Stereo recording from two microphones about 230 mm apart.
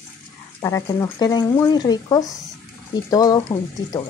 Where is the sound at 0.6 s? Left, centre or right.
Centre.